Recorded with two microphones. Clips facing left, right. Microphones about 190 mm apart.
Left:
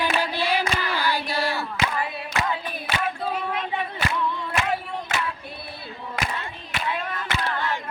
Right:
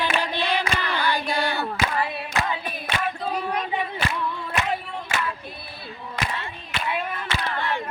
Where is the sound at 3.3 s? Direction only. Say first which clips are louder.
Right 1 dB; 40° right (ahead or behind).